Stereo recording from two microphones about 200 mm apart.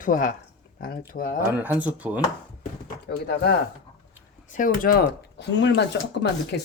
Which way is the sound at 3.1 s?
55° left (ahead or behind).